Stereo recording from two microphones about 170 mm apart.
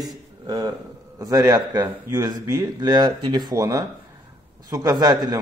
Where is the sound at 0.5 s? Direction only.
25° right (ahead or behind).